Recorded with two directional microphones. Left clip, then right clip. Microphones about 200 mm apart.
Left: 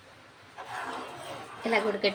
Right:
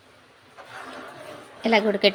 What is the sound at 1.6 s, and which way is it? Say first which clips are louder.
Speech: right 7 dB; 45° right (ahead or behind).